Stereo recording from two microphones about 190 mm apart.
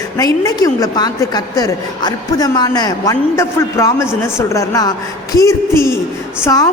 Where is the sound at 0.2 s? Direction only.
20° left (ahead or behind).